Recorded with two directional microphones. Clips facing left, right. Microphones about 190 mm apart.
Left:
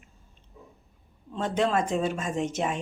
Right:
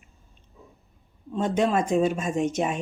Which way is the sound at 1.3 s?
15° right (ahead or behind).